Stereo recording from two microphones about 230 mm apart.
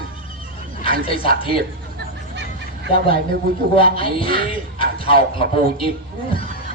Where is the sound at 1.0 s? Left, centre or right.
Left.